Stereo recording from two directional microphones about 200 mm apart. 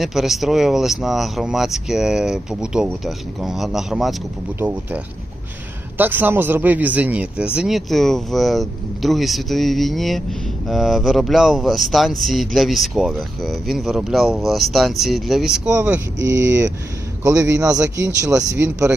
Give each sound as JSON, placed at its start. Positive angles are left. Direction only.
{"t": 0.0, "sound": "a man's voice", "side_deg": 0}
{"t": 16.1, "sound": "speech", "side_deg": -65}
{"t": 17.2, "sound": "a man's voice", "side_deg": -15}